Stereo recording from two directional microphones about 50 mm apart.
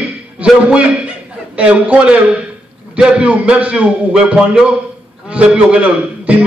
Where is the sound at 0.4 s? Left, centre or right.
Right.